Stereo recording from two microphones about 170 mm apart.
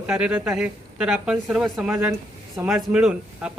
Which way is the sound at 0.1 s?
5° right (ahead or behind).